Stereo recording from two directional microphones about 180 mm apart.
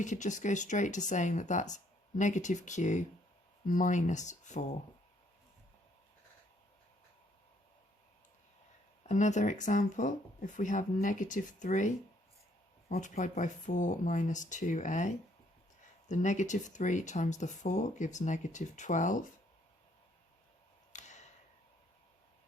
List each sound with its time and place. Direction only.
0.0 s speech: 45° left (ahead or behind)
9.0 s speech: 40° left (ahead or behind)
12.9 s speech: 45° left (ahead or behind)
20.9 s a sound: 40° left (ahead or behind)